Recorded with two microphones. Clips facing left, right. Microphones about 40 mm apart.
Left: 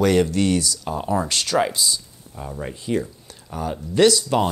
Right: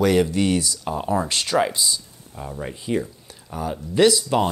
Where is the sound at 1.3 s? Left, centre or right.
Right.